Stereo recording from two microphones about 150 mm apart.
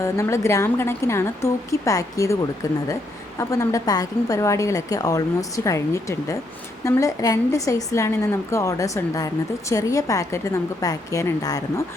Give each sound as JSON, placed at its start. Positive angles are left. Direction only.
{"t": 0.0, "sound": "a woman's voice", "side_deg": 20}